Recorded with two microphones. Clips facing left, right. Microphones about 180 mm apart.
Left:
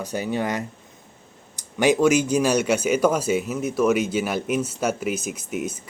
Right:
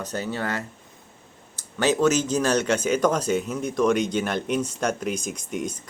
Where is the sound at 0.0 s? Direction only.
10° left (ahead or behind).